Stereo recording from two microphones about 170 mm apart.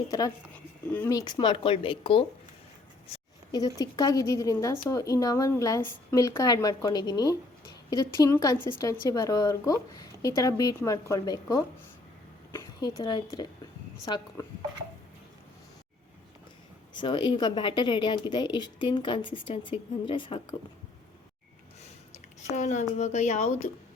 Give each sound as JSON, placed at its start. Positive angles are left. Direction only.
{"t": 1.1, "sound": "a woman's voice", "side_deg": 25}
{"t": 12.5, "sound": "a sound", "side_deg": 15}
{"t": 13.0, "sound": "speech", "side_deg": 25}
{"t": 16.9, "sound": "speech", "side_deg": 25}
{"t": 22.5, "sound": "a woman's voice", "side_deg": 45}